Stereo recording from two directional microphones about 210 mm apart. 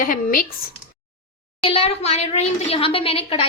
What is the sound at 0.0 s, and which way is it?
Speech, 40° left (ahead or behind).